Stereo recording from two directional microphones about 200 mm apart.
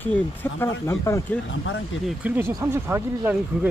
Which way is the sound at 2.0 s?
10° right (ahead or behind).